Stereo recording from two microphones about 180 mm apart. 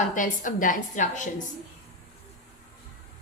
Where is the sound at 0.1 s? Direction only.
45° left (ahead or behind).